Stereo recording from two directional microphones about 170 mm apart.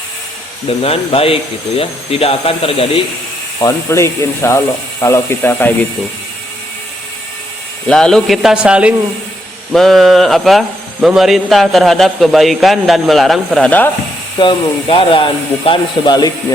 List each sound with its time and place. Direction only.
0.8 s speech: 35° left (ahead or behind)
3.6 s speech: 15° left (ahead or behind)
7.9 s speech: 5° left (ahead or behind)
14.3 s speech: 30° left (ahead or behind)